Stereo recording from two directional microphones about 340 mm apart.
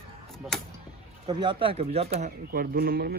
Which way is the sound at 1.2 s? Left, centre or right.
Centre.